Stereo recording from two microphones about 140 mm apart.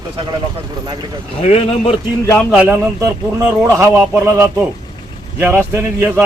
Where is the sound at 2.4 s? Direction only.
5° right (ahead or behind).